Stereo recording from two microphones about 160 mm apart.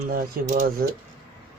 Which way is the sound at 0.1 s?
55° right (ahead or behind).